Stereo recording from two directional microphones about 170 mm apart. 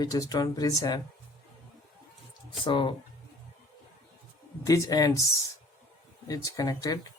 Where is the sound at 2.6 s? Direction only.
25° left (ahead or behind).